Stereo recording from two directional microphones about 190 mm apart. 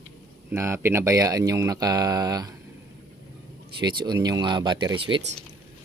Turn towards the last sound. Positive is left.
turn(degrees=-25)  # may be behind; listen again after turning